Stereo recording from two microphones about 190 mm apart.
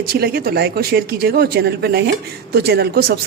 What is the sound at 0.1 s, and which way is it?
Chopping, 55° right (ahead or behind).